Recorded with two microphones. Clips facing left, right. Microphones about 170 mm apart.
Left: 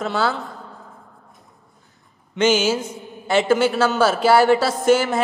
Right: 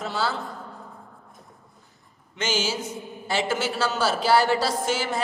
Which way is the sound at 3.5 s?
55° left (ahead or behind).